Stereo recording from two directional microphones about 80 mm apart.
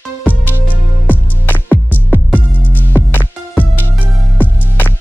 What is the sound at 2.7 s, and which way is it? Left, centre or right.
Music, left.